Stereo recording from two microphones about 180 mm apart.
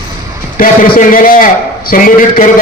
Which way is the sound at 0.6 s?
50° left (ahead or behind).